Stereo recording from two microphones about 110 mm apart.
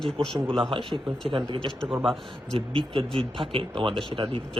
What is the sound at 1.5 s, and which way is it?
Speech, 50° right (ahead or behind).